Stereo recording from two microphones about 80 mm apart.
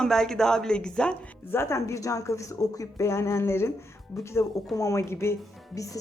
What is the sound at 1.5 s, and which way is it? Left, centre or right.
Speech, left.